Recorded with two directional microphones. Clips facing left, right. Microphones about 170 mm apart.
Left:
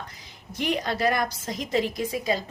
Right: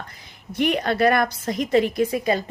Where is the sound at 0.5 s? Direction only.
60° right (ahead or behind).